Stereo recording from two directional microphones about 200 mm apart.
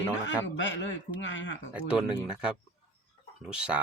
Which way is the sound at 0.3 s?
65° left (ahead or behind).